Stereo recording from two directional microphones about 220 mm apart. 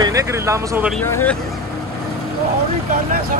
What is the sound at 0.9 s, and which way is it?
Speech, 10° left (ahead or behind).